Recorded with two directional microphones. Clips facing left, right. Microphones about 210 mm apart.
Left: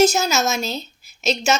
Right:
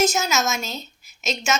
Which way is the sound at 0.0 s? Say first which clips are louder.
Left 4 dB; 30° left (ahead or behind).